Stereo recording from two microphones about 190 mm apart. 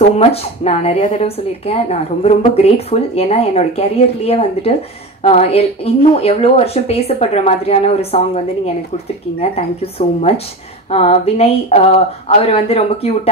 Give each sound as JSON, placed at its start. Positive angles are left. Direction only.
{"t": 0.2, "sound": "a woman's voice", "side_deg": 30}
{"t": 9.4, "sound": "a woman's voice", "side_deg": 30}